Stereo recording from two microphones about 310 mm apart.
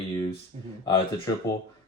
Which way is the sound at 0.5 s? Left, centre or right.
Right.